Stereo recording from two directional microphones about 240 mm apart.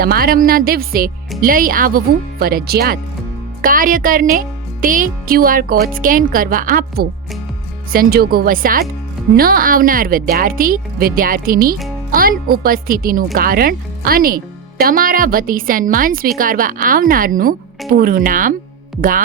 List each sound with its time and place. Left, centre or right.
0.0 s speech: right